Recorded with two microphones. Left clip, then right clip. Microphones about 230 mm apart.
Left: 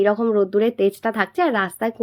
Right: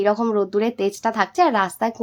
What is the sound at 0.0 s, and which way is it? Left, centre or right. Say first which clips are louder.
A woman's voice: left 1 dB; centre.